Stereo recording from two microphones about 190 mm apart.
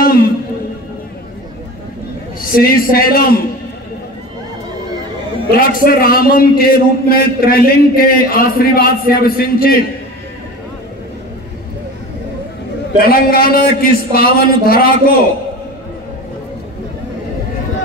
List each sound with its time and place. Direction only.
2.4 s a man's voice: 50° left (ahead or behind)
5.5 s a man's voice: 50° left (ahead or behind)
13.0 s a man's voice: 50° left (ahead or behind)